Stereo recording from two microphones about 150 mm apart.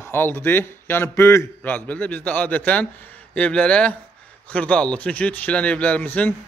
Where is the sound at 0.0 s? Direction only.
15° left (ahead or behind).